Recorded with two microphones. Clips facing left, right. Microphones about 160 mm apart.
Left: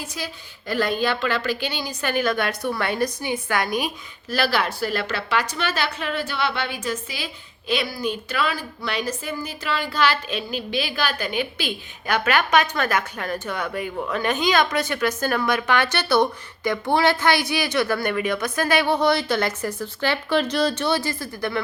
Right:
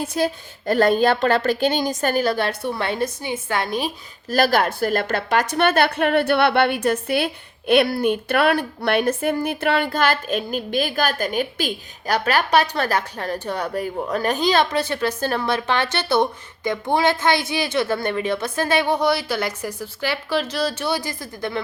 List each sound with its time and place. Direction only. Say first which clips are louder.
0.0 s a woman's voice: right 11 dB; 50° right (ahead or behind); by 3.9 s 30° right (ahead or behind)
4.3 s a woman's voice: right 5 dB; 45° right (ahead or behind); by 18.9 s 25° right (ahead or behind)
18.9 s speech: left 1 dB; 10° right (ahead or behind)